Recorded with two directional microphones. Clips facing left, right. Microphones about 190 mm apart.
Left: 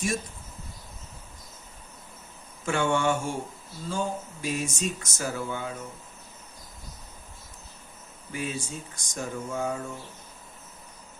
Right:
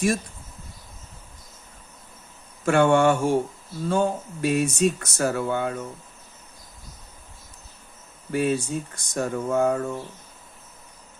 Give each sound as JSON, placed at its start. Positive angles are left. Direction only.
{"t": 2.6, "sound": "speech", "side_deg": -60}
{"t": 8.3, "sound": "speech", "side_deg": -60}